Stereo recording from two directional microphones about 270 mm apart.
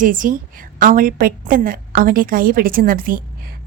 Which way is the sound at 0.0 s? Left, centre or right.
Right.